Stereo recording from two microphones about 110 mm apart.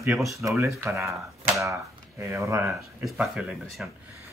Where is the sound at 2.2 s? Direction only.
25° right (ahead or behind).